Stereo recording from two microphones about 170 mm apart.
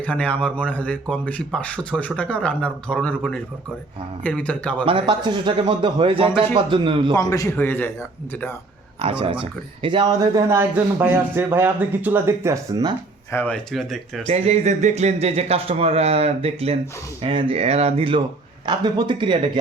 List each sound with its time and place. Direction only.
0.0 s speech: 10° left (ahead or behind)
4.9 s speech: 30° right (ahead or behind)
7.1 s speech: 20° left (ahead or behind)
9.0 s speech: 35° right (ahead or behind)
13.3 s speech: 10° left (ahead or behind)
14.3 s speech: 40° right (ahead or behind)